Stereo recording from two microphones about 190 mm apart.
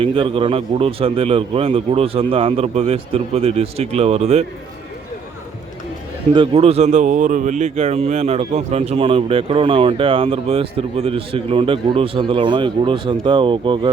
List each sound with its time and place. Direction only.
0.0 s a man's voice: 30° right (ahead or behind)
6.3 s speech: 30° right (ahead or behind)